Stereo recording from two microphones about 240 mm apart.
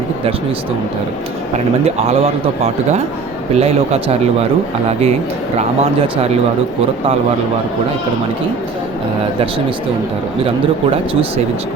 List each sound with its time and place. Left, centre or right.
1.5 s a man's voice: right
3.5 s a man's voice: right